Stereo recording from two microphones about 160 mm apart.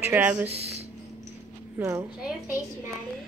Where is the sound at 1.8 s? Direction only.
15° right (ahead or behind).